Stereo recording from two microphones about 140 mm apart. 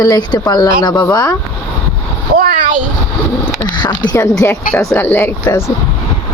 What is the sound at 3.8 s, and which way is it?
A child's voice, 30° left (ahead or behind).